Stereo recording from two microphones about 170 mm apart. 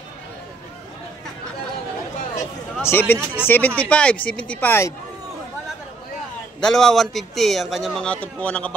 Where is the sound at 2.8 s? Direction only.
15° left (ahead or behind).